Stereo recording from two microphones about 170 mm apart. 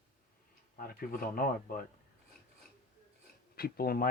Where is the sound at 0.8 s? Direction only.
55° left (ahead or behind).